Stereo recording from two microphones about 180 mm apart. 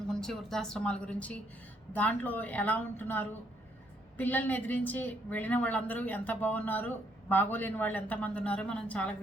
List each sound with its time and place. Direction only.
0.1 s a woman's voice: 5° left (ahead or behind)